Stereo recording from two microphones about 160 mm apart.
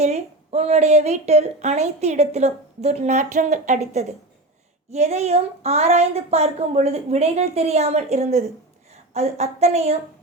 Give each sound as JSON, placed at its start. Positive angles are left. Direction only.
{"t": 0.0, "sound": "a woman's voice", "side_deg": -45}